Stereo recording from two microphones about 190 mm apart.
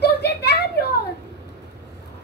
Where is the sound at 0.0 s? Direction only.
60° left (ahead or behind).